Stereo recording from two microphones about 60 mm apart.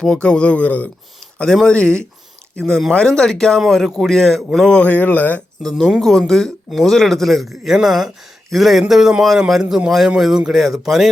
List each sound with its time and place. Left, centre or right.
0.0 s speech: centre
1.2 s a sound: centre
1.6 s speech: centre
4.8 s speech: left
5.6 s speech: centre
7.5 s a man's voice: centre